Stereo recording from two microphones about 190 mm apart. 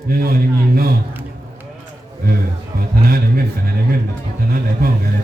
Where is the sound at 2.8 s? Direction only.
50° right (ahead or behind).